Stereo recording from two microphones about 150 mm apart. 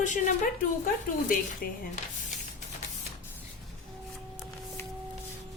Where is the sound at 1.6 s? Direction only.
90° left.